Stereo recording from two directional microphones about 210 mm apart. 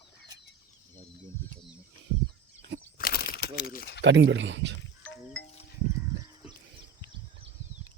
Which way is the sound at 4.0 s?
60° right (ahead or behind).